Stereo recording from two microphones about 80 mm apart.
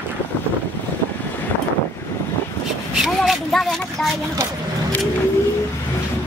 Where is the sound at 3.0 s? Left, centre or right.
Centre.